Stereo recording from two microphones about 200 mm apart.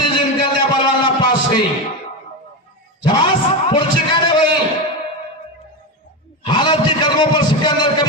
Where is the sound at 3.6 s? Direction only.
25° left (ahead or behind).